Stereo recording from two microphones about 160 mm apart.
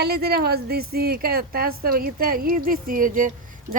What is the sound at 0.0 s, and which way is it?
A woman's voice, 85° right.